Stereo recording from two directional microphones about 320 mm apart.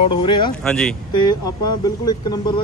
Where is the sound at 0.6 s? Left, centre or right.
Centre.